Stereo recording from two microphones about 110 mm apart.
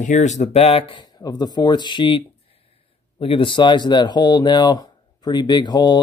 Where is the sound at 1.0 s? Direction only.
35° left (ahead or behind).